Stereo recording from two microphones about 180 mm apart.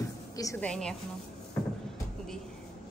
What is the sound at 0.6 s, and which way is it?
Speech, 5° left (ahead or behind).